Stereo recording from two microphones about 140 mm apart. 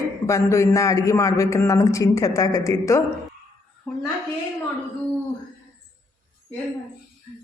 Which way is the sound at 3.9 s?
10° left (ahead or behind).